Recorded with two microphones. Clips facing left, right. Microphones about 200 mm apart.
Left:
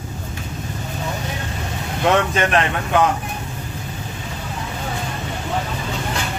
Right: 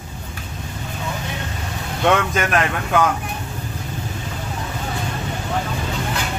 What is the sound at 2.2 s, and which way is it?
Speech, 30° left (ahead or behind).